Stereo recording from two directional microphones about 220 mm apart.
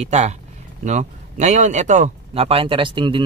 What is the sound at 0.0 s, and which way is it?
Speech, 30° right (ahead or behind).